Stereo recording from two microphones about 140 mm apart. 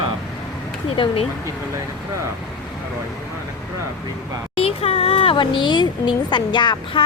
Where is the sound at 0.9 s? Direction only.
40° left (ahead or behind).